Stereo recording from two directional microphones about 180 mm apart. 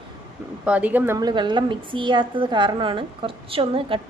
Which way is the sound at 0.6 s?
5° right (ahead or behind).